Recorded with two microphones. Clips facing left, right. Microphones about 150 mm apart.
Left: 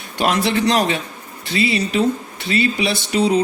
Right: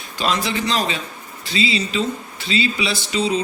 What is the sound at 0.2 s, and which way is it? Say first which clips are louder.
Speech: left 4 dB; 65° left (ahead or behind).